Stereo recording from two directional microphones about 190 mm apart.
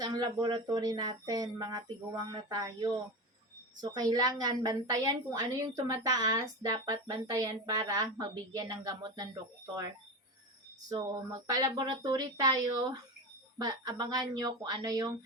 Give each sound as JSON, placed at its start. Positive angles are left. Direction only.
{"t": 0.0, "sound": "a woman's voice", "side_deg": -20}
{"t": 10.8, "sound": "a woman's voice", "side_deg": -20}